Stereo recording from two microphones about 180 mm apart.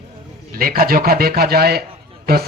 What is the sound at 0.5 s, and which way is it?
A man's voice, 55° right (ahead or behind).